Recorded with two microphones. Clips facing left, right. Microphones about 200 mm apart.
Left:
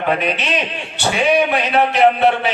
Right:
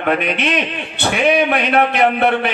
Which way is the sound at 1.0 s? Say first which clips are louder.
Right 1 dB; 60° right (ahead or behind).